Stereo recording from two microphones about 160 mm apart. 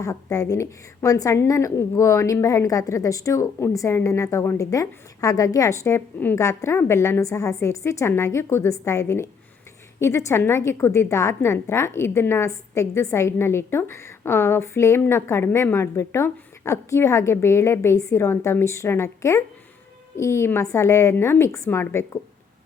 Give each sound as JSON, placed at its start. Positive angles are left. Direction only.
{"t": 0.0, "sound": "a woman's voice", "side_deg": 20}